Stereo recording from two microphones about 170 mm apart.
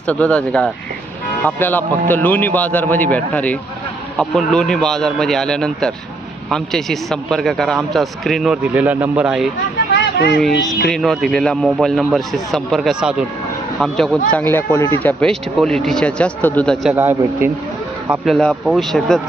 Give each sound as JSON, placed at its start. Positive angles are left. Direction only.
{"t": 0.1, "sound": "a man's voice", "side_deg": 10}
{"t": 9.9, "sound": "a sound", "side_deg": 70}
{"t": 10.8, "sound": "a man's voice", "side_deg": 0}
{"t": 16.9, "sound": "speech", "side_deg": -10}
{"t": 18.1, "sound": "a man's voice", "side_deg": 0}